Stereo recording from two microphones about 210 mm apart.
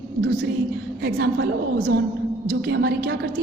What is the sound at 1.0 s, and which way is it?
A woman's voice, 55° right (ahead or behind).